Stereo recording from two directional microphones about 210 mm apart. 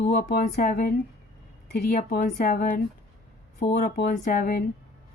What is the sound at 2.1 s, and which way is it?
Speech, 40° left (ahead or behind).